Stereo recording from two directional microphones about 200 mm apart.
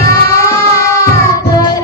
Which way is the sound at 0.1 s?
15° left (ahead or behind).